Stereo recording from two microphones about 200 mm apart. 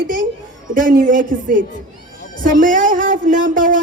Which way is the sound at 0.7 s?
40° right (ahead or behind).